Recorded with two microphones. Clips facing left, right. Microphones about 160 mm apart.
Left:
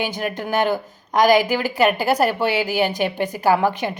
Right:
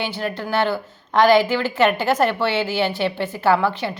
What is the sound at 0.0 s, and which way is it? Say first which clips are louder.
A woman's voice: left 1 dB; 15° left (ahead or behind).